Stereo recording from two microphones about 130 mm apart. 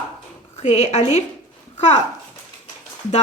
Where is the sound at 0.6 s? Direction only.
55° left (ahead or behind).